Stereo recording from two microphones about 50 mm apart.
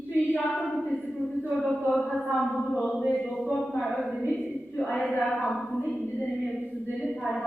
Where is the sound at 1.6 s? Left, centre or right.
Centre.